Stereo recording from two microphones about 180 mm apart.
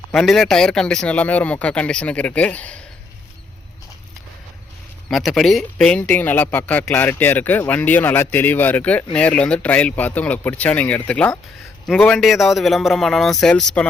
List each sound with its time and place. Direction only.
0.1 s speech: 5° left (ahead or behind)
5.0 s a man's voice: centre (ahead or behind)